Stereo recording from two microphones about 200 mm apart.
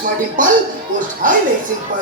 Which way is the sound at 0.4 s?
40° right (ahead or behind).